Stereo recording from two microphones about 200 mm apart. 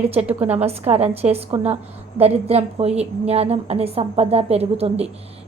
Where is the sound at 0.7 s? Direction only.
30° right (ahead or behind).